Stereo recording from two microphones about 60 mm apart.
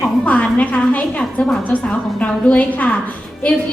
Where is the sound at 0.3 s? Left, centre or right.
Left.